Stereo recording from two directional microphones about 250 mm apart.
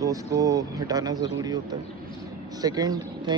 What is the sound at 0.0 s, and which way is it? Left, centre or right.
Speech, centre.